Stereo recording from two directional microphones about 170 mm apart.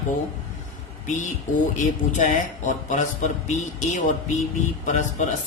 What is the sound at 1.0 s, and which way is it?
Speech, 45° left (ahead or behind).